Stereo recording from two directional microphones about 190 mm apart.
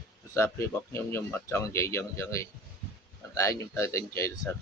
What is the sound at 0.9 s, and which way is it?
Speech, 15° left (ahead or behind).